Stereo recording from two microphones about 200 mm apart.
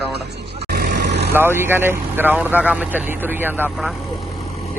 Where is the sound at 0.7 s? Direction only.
50° right (ahead or behind).